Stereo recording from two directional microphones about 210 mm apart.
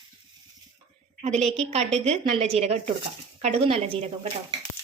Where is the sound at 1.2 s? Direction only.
30° right (ahead or behind).